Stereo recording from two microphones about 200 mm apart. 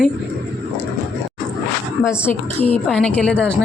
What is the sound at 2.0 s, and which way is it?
Speech, 10° left (ahead or behind).